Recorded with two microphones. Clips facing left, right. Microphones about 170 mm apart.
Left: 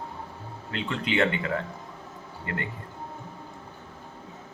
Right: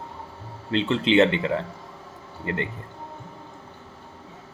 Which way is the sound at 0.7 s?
25° right (ahead or behind).